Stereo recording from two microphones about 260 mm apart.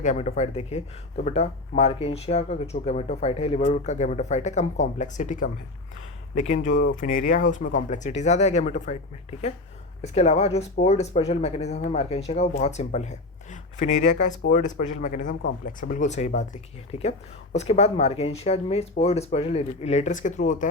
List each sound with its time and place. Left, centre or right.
0.0 s speech: left
10.0 s speech: left